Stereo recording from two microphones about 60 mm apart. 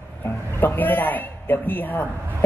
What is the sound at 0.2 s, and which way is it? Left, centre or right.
A man's voice, left.